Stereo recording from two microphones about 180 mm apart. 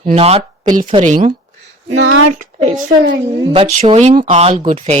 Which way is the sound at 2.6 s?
45° right (ahead or behind).